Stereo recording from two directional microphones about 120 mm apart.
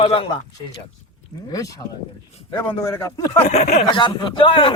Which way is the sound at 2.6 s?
20° left (ahead or behind).